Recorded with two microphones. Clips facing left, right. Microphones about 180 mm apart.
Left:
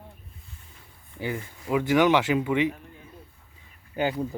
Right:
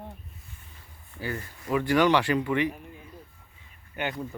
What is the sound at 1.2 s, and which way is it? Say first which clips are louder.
Speech: left 3 dB; 15° left (ahead or behind).